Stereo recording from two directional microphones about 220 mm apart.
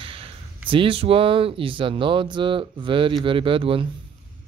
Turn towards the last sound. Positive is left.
turn(degrees=-25)  # may be behind; listen again after turning